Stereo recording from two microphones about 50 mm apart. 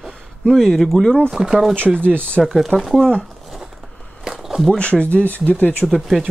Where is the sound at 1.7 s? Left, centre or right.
Right.